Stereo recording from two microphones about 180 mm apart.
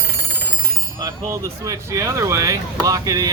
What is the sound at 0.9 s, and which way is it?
Speech, 20° right (ahead or behind).